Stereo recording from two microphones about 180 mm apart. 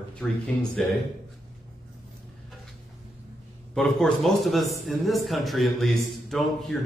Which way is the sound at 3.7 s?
Centre (ahead or behind).